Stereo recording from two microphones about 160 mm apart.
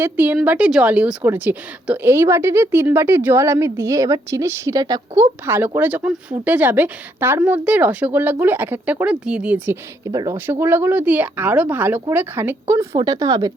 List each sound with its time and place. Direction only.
0.0 s a woman's voice: 10° right (ahead or behind)
10.0 s a woman's voice: 25° right (ahead or behind)